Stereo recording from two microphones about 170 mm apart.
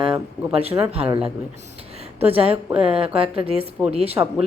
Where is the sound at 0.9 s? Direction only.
35° right (ahead or behind).